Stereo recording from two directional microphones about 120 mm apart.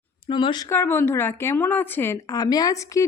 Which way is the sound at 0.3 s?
40° left (ahead or behind).